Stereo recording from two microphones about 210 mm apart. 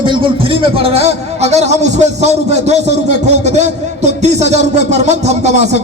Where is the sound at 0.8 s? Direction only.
30° right (ahead or behind).